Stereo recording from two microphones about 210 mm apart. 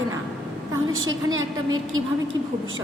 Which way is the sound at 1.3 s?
75° right (ahead or behind).